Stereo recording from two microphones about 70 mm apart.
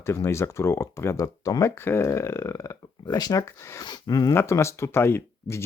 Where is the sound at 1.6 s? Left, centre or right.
Left.